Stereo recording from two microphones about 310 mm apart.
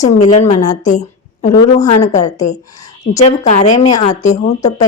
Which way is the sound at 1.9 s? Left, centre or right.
Left.